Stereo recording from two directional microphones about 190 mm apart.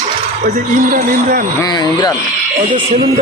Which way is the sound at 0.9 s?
50° right (ahead or behind).